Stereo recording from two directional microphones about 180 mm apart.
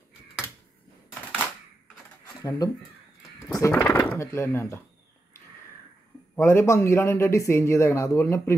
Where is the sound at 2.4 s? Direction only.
20° left (ahead or behind).